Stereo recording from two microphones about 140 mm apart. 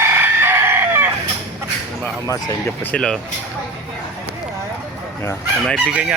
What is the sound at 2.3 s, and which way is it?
Speech, 25° left (ahead or behind).